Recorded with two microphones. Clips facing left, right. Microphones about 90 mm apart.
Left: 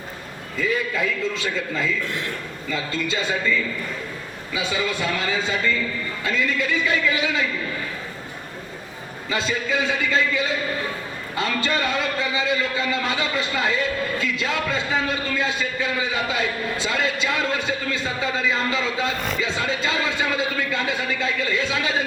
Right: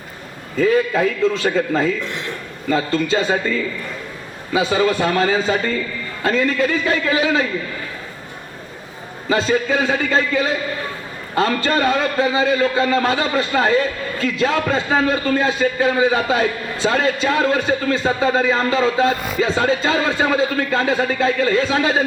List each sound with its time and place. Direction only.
0.5 s a man's voice: 45° right (ahead or behind)
2.0 s speech: 20° right (ahead or behind)
2.6 s a man's voice: 45° right (ahead or behind)
9.3 s a man's voice: 40° right (ahead or behind)